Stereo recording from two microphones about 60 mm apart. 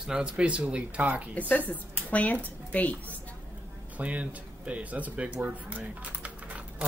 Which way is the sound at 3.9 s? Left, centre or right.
Right.